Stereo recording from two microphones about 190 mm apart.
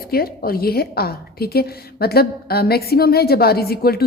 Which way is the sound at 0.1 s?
50° left (ahead or behind).